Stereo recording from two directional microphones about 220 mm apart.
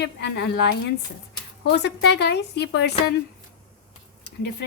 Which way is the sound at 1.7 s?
50° left (ahead or behind).